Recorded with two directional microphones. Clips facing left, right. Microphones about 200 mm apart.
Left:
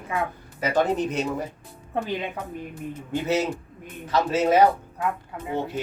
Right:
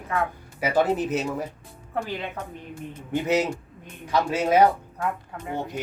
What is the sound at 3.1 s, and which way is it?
Speech, 15° right (ahead or behind).